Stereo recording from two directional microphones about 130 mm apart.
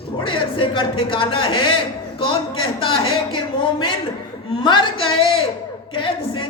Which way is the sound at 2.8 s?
45° left (ahead or behind).